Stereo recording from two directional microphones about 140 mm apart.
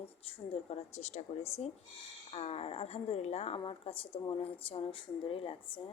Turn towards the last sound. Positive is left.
turn(degrees=40)  # may be behind; listen again after turning